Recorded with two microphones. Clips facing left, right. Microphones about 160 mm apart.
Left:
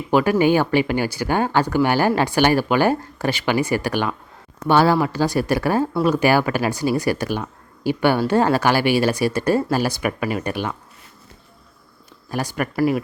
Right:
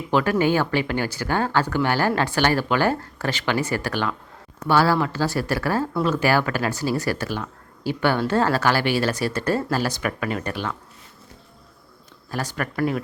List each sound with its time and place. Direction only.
0.1 s speech: 10° left (ahead or behind)
12.3 s speech: 15° left (ahead or behind)